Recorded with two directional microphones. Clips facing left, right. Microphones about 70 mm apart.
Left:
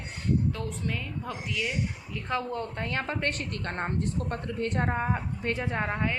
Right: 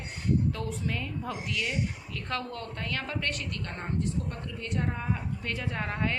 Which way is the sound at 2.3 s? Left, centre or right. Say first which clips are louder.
Left 4 dB; centre.